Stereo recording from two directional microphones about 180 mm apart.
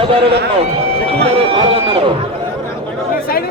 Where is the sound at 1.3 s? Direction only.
30° right (ahead or behind).